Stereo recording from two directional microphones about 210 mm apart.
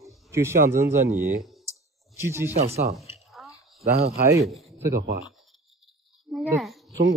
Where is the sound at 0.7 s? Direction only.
10° right (ahead or behind).